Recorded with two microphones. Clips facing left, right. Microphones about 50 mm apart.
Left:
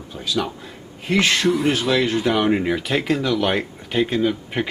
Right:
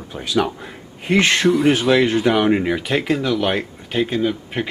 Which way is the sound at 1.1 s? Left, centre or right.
Centre.